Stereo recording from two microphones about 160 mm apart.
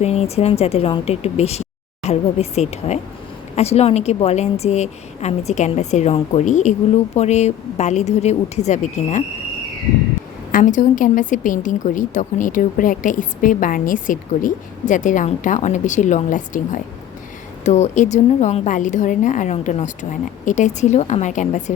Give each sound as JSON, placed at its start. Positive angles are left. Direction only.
{"t": 0.0, "sound": "a woman's voice", "side_deg": 40}
{"t": 10.5, "sound": "a woman's voice", "side_deg": 50}